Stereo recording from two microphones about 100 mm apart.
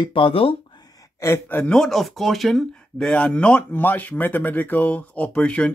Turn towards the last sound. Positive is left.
turn(degrees=10)  # may be behind; listen again after turning